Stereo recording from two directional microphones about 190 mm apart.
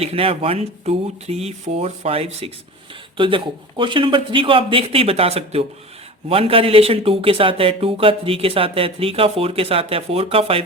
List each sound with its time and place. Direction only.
0.0 s speech: 30° right (ahead or behind)